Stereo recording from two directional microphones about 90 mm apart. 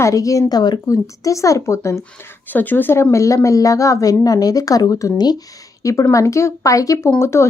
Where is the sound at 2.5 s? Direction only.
20° left (ahead or behind); by 5.4 s 50° left (ahead or behind).